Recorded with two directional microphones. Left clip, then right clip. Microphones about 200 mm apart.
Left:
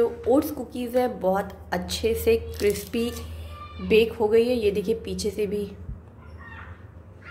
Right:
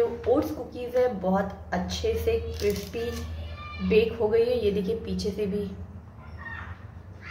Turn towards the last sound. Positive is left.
turn(degrees=35)  # may be behind; listen again after turning